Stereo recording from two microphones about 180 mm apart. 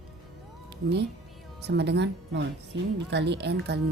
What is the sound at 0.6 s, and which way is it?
Speech, 70° right (ahead or behind).